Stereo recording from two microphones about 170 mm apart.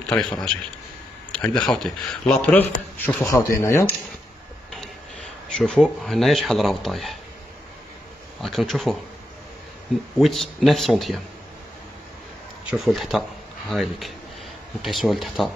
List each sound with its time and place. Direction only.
0.1 s speech: 5° left (ahead or behind)
5.6 s speech: centre (ahead or behind)
8.4 s speech: centre (ahead or behind)
10.1 s speech: centre (ahead or behind)
12.6 s speech: centre (ahead or behind)